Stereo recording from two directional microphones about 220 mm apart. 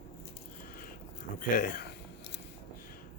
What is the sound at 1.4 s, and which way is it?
Speech, 40° left (ahead or behind).